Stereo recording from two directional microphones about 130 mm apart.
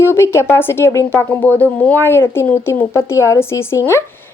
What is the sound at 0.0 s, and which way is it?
Speech, 20° left (ahead or behind).